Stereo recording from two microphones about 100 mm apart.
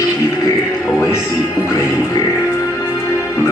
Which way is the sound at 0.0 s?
30° left (ahead or behind).